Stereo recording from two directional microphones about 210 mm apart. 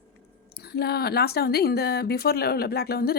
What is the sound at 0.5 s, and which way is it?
A woman's voice, 50° left (ahead or behind).